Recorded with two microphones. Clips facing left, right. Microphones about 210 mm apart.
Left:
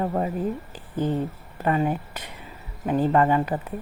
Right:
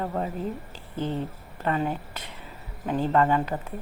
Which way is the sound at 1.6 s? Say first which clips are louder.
Left 4 dB; 10° left (ahead or behind).